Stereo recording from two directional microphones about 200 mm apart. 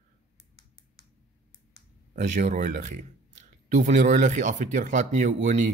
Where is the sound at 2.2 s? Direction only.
35° right (ahead or behind).